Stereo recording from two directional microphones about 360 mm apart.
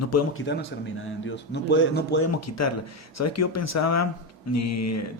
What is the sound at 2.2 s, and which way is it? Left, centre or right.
Speech, left.